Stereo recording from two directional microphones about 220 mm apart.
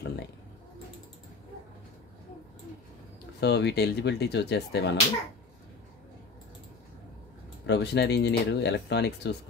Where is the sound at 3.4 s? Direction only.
50° left (ahead or behind).